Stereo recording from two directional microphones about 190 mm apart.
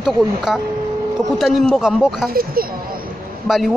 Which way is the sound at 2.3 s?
50° right (ahead or behind).